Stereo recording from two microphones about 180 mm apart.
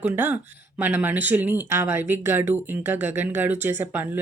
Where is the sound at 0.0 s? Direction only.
10° right (ahead or behind).